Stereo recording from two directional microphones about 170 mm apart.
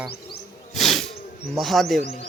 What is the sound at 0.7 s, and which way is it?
Sneeze, centre (ahead or behind).